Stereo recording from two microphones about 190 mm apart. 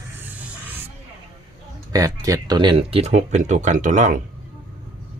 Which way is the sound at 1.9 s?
15° right (ahead or behind).